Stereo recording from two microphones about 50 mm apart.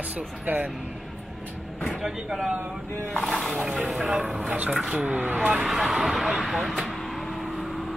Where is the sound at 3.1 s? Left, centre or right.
Centre.